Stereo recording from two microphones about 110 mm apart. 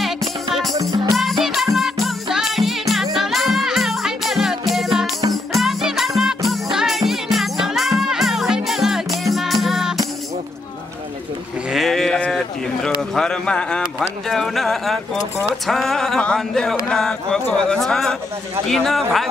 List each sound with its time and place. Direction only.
0.7 s music: 35° right (ahead or behind)
1.4 s music: centre (ahead or behind)
11.7 s sheep: centre (ahead or behind)
13.1 s a sound: 5° left (ahead or behind)